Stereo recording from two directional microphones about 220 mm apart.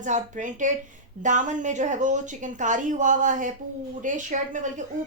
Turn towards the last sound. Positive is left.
turn(degrees=-35)  # may be behind; listen again after turning